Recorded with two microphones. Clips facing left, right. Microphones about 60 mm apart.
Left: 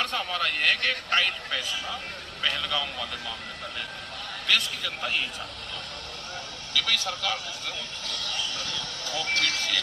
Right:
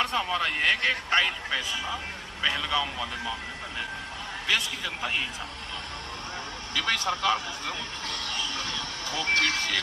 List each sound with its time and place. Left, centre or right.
0.0 s speech: centre
0.7 s speech: centre
2.8 s speech: right
4.4 s speech: centre
6.7 s speech: right